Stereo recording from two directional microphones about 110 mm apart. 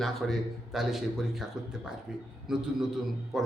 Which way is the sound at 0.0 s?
Centre (ahead or behind).